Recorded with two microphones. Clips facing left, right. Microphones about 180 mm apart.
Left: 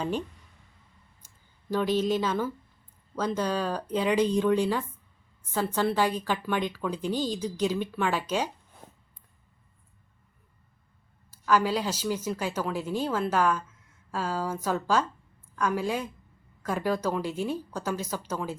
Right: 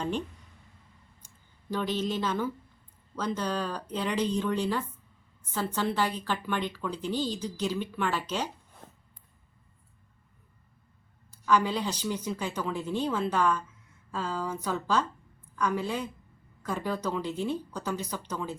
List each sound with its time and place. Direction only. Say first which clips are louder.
1.2 s clicking: right 2 dB; 10° left (ahead or behind)
1.7 s a woman's voice: left 5 dB; 10° left (ahead or behind)
8.8 s a sound: left 1 dB; 10° left (ahead or behind)
11.3 s a woman's voice: left 1 dB; 5° left (ahead or behind)